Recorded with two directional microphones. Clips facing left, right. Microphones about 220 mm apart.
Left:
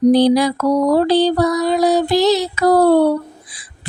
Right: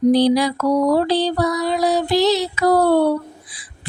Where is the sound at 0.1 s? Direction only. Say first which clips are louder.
Left 3 dB; 50° left (ahead or behind).